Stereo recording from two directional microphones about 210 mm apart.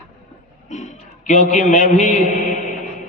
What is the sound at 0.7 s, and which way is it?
A man's voice, 35° left (ahead or behind).